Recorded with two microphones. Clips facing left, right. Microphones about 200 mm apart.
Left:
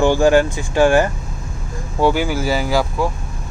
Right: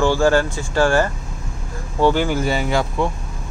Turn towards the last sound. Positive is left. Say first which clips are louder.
# left 1 dB
turn(degrees=5)  # may be behind; listen again after turning